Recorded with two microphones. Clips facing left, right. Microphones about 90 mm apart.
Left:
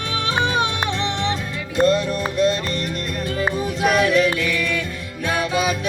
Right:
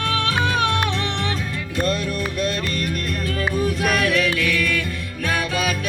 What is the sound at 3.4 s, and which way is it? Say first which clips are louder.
Music: left 1 dB; 20° left (ahead or behind).